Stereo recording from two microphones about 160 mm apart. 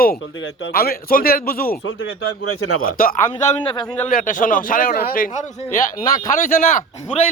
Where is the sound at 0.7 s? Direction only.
70° left (ahead or behind).